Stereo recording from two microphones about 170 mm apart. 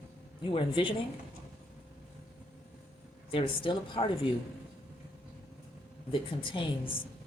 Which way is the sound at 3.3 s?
30° left (ahead or behind).